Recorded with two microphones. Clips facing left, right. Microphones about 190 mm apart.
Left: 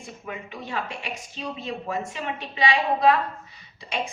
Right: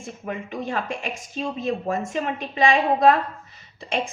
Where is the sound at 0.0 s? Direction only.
45° right (ahead or behind).